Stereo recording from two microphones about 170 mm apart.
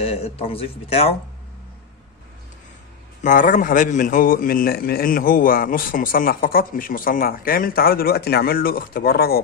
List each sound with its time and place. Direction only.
0.0 s speech: 35° left (ahead or behind)
3.3 s a man's voice: 50° left (ahead or behind)